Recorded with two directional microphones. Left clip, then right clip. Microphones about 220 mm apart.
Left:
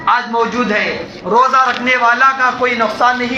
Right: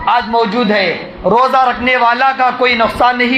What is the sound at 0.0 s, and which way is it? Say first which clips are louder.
A man's voice: right 2 dB; 45° right (ahead or behind).